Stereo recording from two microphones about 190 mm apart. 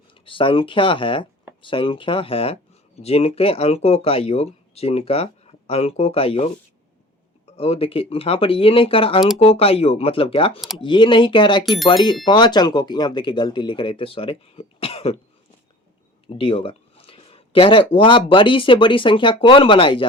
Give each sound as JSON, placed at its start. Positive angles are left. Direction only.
{"t": 0.1, "sound": "speech", "side_deg": 25}
{"t": 7.5, "sound": "speech", "side_deg": 30}
{"t": 16.4, "sound": "speech", "side_deg": 30}